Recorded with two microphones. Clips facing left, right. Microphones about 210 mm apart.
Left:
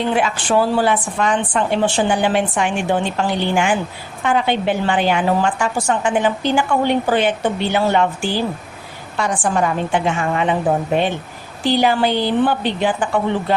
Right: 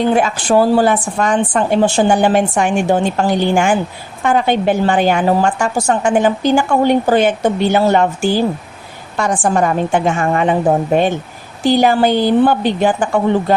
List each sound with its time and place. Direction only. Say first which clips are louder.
0.0 s a woman's voice: right 5 dB; 45° right (ahead or behind)